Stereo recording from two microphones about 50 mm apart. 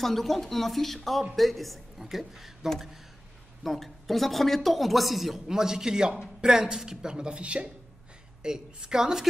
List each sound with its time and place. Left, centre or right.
0.0 s a woman's voice: centre